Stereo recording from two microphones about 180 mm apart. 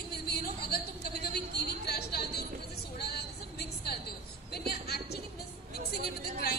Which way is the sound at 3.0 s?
60° left (ahead or behind).